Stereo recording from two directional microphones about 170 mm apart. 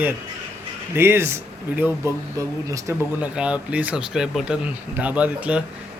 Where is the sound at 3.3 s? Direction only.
5° right (ahead or behind).